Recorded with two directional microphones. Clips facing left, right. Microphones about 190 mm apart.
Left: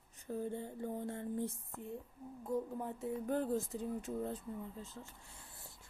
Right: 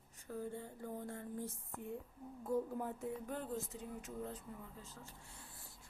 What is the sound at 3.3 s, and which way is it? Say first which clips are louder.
Speech: left 7 dB; 35° left (ahead or behind).